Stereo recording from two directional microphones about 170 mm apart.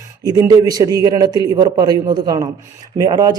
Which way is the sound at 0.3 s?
20° right (ahead or behind).